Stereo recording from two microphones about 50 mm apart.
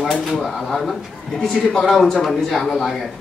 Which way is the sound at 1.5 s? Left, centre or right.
Centre.